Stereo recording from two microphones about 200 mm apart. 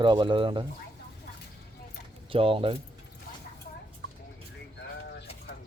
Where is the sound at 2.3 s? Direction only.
25° right (ahead or behind).